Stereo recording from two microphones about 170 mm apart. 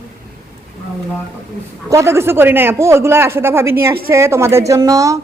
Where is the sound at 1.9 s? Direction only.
15° right (ahead or behind).